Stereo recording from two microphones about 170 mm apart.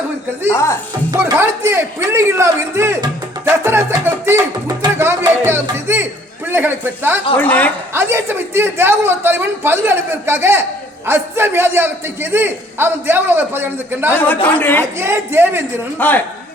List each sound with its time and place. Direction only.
0.5 s a woman's voice: 15° left (ahead or behind)
1.4 s a man's voice: 15° right (ahead or behind)
7.3 s a woman's voice: 10° left (ahead or behind)
7.9 s a man's voice: 15° right (ahead or behind)
14.6 s a woman's voice: 10° left (ahead or behind)
14.9 s a man's voice: 15° right (ahead or behind)
16.0 s a woman's voice: 10° left (ahead or behind)